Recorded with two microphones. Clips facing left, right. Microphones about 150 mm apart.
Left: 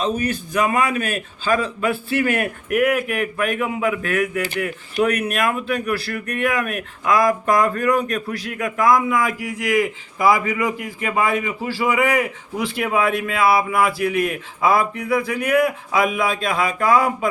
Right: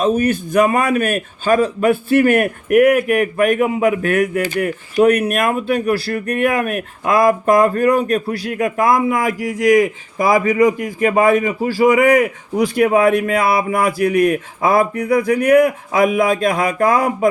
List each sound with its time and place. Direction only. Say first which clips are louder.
0.0 s speech: right 6 dB; 50° right (ahead or behind)